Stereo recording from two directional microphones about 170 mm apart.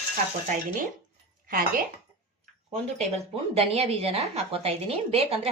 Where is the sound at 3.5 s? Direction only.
35° right (ahead or behind).